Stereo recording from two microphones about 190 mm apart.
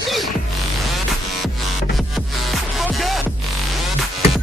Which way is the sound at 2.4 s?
Centre (ahead or behind).